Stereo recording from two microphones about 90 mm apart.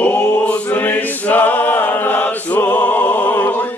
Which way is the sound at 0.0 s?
20° left (ahead or behind).